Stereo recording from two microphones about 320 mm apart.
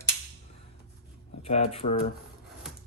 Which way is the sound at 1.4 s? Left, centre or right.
Centre.